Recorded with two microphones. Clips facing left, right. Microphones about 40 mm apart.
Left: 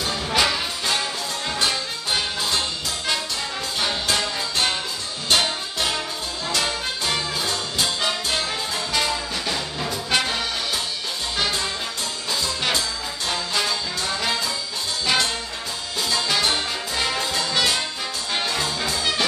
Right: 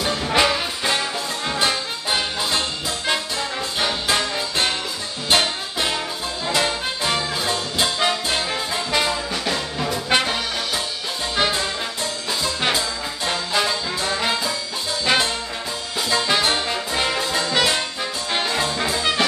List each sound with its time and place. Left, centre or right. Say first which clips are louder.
0.3 s music: right 2 dB; centre
3.8 s music: right 2 dB; centre
9.3 s music: right 2 dB; centre